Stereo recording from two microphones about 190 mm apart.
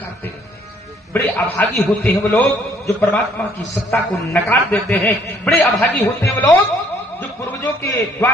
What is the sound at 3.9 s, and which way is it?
A man's voice, 10° left (ahead or behind).